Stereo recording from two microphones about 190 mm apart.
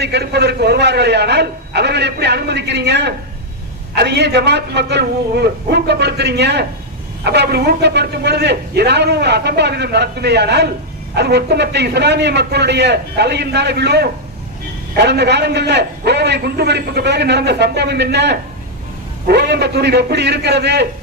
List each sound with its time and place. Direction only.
0.0 s a man's voice: 60° right (ahead or behind)